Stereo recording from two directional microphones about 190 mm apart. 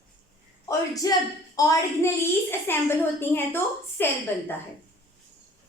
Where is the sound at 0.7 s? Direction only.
20° left (ahead or behind).